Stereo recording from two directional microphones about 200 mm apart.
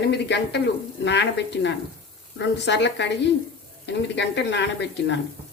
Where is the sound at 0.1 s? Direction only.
60° left (ahead or behind).